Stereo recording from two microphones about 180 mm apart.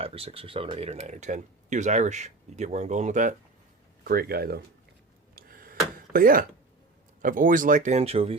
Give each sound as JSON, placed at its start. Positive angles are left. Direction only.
{"t": 0.0, "sound": "speech", "side_deg": -35}
{"t": 4.0, "sound": "speech", "side_deg": -60}
{"t": 5.3, "sound": "tick-tock", "side_deg": -55}
{"t": 6.1, "sound": "speech", "side_deg": -50}